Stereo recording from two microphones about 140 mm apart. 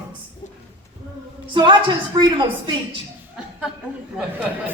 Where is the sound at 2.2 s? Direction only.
35° right (ahead or behind).